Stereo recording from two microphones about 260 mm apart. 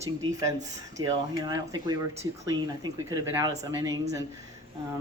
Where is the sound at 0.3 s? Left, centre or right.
Centre.